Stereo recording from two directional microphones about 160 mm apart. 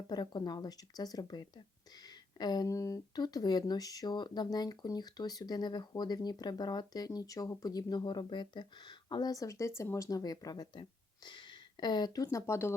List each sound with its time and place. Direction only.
0.1 s speech: 25° left (ahead or behind)